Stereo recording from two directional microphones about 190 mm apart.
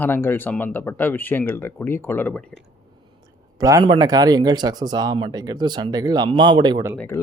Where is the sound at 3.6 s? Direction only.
20° right (ahead or behind).